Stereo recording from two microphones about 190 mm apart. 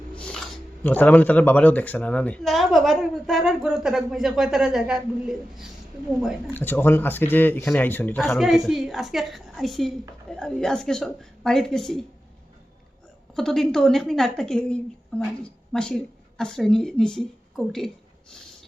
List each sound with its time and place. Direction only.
0.2 s speech: 5° left (ahead or behind)
6.5 s speech: 10° left (ahead or behind)
13.3 s speech: centre (ahead or behind)